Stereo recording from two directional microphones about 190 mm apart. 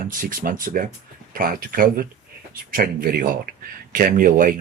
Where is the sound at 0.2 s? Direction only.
45° right (ahead or behind).